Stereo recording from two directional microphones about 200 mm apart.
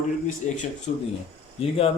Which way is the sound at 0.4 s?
40° left (ahead or behind).